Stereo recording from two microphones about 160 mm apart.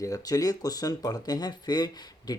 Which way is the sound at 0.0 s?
20° left (ahead or behind).